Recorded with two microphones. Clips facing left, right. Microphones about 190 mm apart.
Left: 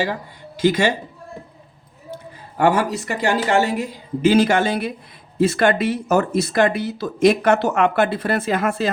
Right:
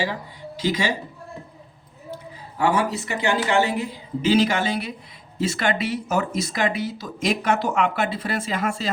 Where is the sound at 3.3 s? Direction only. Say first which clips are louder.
Left 2 dB; 45° left (ahead or behind).